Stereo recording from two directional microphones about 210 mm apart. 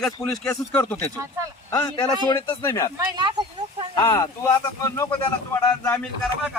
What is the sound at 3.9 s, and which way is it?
Speech, 20° left (ahead or behind).